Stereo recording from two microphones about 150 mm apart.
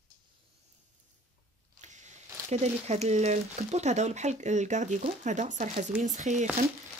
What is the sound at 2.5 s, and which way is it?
Speech, 45° right (ahead or behind).